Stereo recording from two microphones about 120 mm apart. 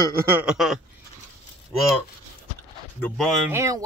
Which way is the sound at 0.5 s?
Centre (ahead or behind).